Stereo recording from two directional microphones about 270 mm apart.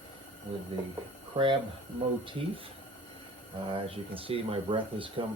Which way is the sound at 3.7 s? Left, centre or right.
Right.